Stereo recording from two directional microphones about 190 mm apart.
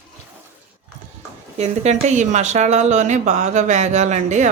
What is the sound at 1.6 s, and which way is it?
Speech, 35° right (ahead or behind).